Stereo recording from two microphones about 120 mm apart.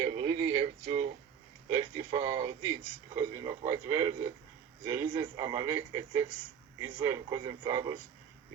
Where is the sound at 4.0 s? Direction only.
65° right (ahead or behind).